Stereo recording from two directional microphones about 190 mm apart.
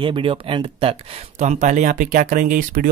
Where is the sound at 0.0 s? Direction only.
25° right (ahead or behind).